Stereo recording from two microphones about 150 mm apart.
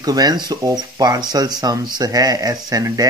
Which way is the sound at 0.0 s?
25° right (ahead or behind).